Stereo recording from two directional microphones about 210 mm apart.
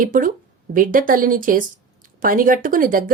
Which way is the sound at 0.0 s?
40° right (ahead or behind).